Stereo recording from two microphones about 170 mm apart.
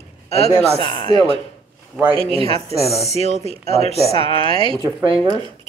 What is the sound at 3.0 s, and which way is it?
Speech, 40° left (ahead or behind).